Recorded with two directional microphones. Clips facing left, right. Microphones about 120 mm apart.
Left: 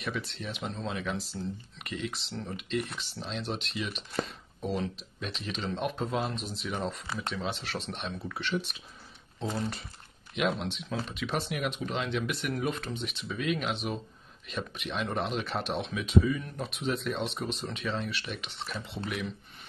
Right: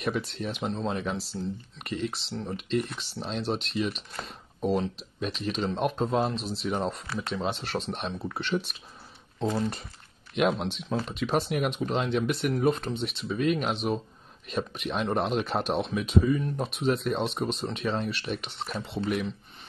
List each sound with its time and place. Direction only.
0.0 s speech: 45° right (ahead or behind)
10.3 s speech: 50° right (ahead or behind)